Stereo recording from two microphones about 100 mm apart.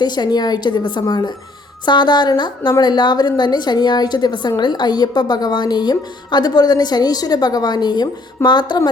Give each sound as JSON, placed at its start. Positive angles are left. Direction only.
{"t": 0.0, "sound": "a woman's voice", "side_deg": 45}